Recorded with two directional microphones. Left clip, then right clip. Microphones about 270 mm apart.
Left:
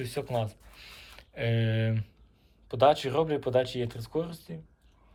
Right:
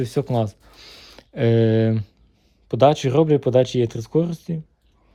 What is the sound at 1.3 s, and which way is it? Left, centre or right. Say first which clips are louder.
Speech: right 13 dB; right.